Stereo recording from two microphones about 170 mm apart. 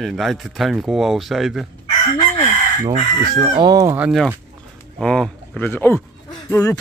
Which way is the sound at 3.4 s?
20° right (ahead or behind).